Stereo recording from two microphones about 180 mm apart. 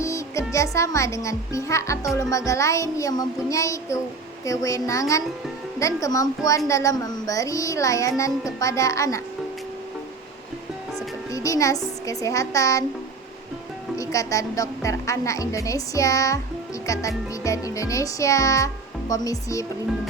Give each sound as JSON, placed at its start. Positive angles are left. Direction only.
{"t": 0.0, "sound": "a child's voice", "side_deg": 15}
{"t": 2.1, "sound": "music", "side_deg": 15}
{"t": 11.3, "sound": "music", "side_deg": 20}
{"t": 13.9, "sound": "music", "side_deg": 15}